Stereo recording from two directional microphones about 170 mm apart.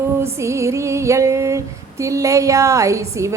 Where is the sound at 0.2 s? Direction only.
15° right (ahead or behind).